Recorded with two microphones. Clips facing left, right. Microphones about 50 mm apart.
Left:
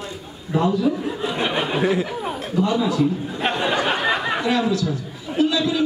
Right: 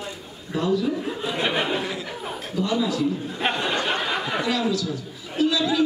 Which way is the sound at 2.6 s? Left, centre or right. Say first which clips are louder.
Left 4 dB; left.